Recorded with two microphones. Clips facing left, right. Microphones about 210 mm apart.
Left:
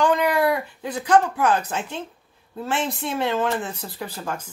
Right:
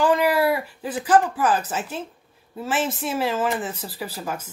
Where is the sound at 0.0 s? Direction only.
5° right (ahead or behind).